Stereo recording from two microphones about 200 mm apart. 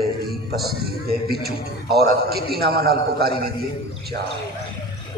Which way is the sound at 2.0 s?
50° right (ahead or behind).